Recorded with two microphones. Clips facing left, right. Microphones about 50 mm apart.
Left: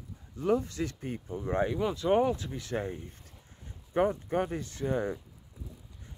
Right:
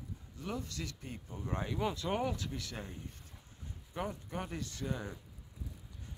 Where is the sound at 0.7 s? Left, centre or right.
Left.